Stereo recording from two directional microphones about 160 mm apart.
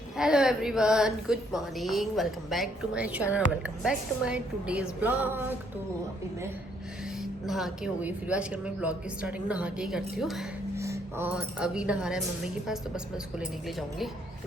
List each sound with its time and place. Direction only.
0.2 s a woman's voice: 5° right (ahead or behind)
7.2 s a woman's voice: centre (ahead or behind)
10.8 s a sound: 20° right (ahead or behind)
11.3 s a woman's voice: 5° right (ahead or behind)
13.4 s a woman's voice: centre (ahead or behind)